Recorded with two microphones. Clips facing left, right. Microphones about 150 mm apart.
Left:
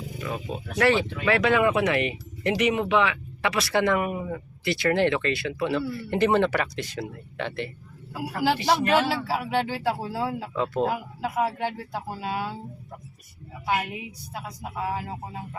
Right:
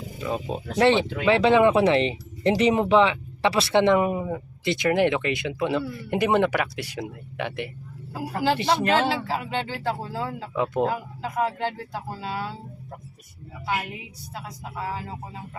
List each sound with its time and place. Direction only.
0.2 s speech: 25° right (ahead or behind)
8.8 s speech: 20° right (ahead or behind)
9.2 s speech: 5° left (ahead or behind)
10.5 s speech: 15° right (ahead or behind)
10.8 s speech: 10° left (ahead or behind)
14.3 s speech: 15° left (ahead or behind)